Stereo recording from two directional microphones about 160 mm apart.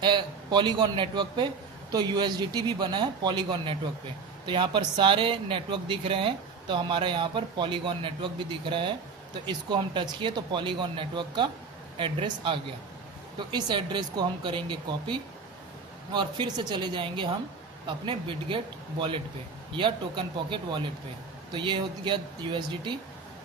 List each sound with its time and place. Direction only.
0.0 s speech: 30° right (ahead or behind)